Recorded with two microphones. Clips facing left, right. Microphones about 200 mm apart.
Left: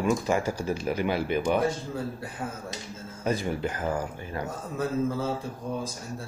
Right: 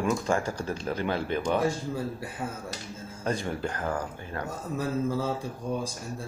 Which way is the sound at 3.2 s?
5° left (ahead or behind).